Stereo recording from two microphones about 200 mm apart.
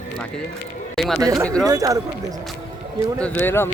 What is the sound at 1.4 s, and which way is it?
Speech, 5° left (ahead or behind).